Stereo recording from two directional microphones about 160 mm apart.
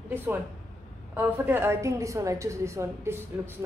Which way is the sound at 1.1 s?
10° right (ahead or behind).